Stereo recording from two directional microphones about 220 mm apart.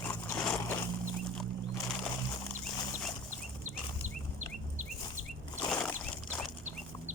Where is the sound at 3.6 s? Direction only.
35° right (ahead or behind).